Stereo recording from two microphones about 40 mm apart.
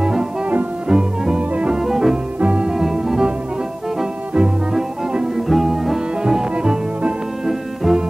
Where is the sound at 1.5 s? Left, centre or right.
Right.